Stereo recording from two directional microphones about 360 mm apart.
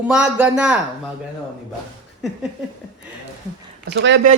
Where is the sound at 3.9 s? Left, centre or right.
Right.